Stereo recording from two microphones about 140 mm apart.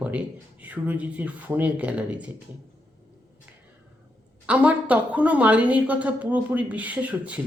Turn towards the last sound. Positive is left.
turn(degrees=-10)  # may be behind; listen again after turning